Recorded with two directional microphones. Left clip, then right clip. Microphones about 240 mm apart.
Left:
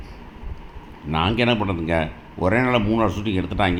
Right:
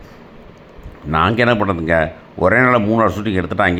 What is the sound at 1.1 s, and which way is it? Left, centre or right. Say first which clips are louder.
Speech: right 6 dB; centre.